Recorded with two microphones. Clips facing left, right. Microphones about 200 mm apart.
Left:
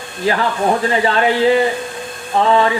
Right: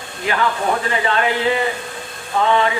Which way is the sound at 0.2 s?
35° left (ahead or behind).